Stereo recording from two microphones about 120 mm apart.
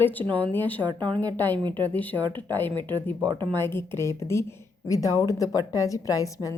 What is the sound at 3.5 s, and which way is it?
A woman's voice, 20° left (ahead or behind).